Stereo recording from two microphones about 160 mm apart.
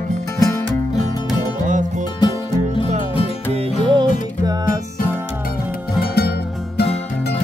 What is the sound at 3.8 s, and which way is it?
Music, 30° right (ahead or behind).